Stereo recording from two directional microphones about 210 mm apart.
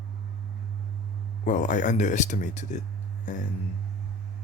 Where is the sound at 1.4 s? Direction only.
35° left (ahead or behind).